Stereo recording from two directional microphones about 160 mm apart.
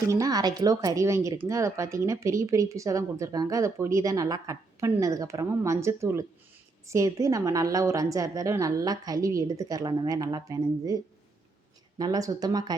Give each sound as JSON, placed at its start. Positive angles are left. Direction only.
{"t": 0.1, "sound": "a woman's voice", "side_deg": -20}